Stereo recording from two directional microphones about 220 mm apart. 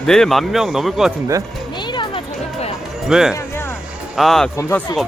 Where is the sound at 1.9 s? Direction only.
20° left (ahead or behind).